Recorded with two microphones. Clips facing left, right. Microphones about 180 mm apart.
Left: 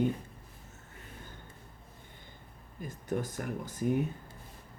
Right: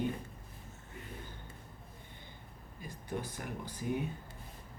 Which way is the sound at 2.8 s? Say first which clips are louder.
Left 6 dB; 45° left (ahead or behind).